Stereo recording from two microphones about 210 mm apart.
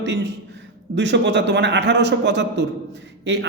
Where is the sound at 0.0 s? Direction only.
55° right (ahead or behind).